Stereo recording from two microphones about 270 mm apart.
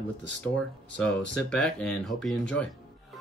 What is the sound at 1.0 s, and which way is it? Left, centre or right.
Speech, centre.